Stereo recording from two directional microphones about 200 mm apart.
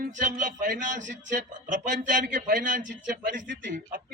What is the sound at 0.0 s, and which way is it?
A man's voice, 40° right (ahead or behind).